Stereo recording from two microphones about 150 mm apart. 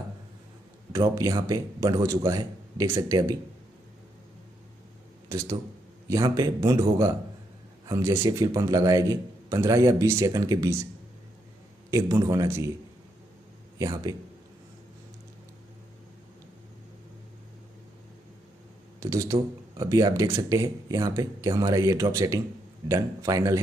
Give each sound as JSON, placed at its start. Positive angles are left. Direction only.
{"t": 0.9, "sound": "speech", "side_deg": -20}
{"t": 5.3, "sound": "speech", "side_deg": -20}
{"t": 11.9, "sound": "speech", "side_deg": -20}
{"t": 13.7, "sound": "speech", "side_deg": -20}
{"t": 18.9, "sound": "speech", "side_deg": -20}